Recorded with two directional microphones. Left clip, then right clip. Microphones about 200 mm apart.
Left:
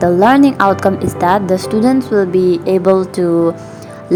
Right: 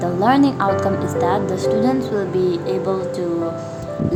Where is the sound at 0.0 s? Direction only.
30° left (ahead or behind).